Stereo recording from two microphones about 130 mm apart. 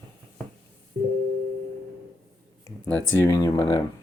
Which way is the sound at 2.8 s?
15° left (ahead or behind).